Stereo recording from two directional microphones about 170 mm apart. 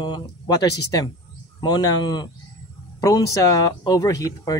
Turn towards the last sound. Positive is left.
turn(degrees=20)  # may be behind; listen again after turning